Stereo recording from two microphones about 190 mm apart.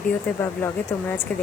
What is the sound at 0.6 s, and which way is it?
Speech, 15° left (ahead or behind).